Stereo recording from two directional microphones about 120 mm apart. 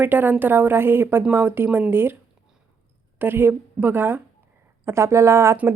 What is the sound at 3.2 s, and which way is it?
A woman's voice, 20° right (ahead or behind).